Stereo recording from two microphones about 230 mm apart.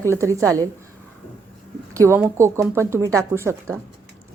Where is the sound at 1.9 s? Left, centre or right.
Centre.